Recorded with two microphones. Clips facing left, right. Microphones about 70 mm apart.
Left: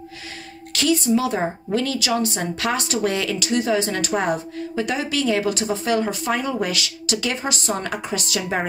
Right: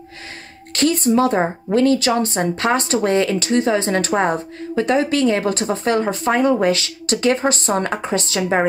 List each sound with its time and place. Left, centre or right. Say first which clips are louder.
0.7 s a woman's voice: right 3 dB; right